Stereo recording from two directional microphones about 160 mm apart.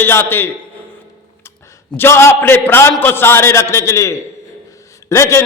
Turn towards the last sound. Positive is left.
turn(degrees=20)  # may be behind; listen again after turning